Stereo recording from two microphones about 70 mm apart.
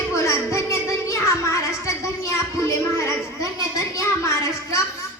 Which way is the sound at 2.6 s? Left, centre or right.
Left.